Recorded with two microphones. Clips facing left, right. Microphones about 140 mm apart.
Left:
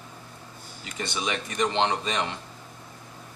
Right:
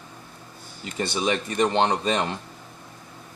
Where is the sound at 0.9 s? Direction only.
35° right (ahead or behind).